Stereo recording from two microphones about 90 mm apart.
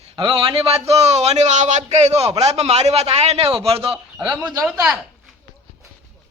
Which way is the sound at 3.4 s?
90° right.